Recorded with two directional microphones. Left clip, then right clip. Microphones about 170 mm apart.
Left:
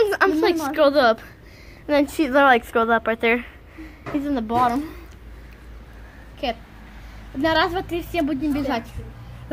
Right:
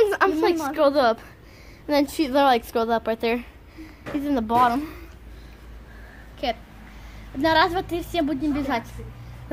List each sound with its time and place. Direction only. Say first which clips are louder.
0.1 s a sound: left 2 dB; 5° left (ahead or behind)
0.7 s a woman's voice: left 4 dB; 5° left (ahead or behind); by 3.4 s 10° right (ahead or behind)
4.0 s speech: even; 30° right (ahead or behind)
4.6 s a woman's voice: right 1 dB; 20° left (ahead or behind)
6.4 s a woman's voice: even; 35° left (ahead or behind)